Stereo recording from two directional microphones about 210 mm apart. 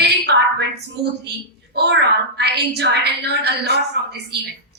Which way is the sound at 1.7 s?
50° right (ahead or behind).